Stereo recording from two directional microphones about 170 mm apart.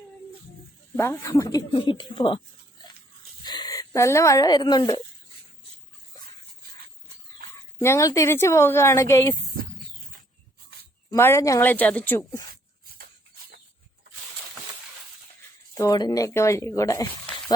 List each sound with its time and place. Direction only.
0.9 s speech: 15° left (ahead or behind)
3.4 s speech: 25° left (ahead or behind)
7.8 s a woman's voice: 15° left (ahead or behind)
11.1 s a woman's voice: 15° left (ahead or behind)
15.7 s speech: 20° left (ahead or behind)